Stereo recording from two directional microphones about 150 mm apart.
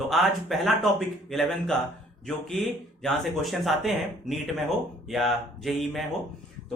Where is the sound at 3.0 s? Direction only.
Centre (ahead or behind).